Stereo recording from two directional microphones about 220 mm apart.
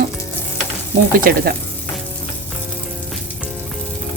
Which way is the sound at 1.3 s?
40° right (ahead or behind).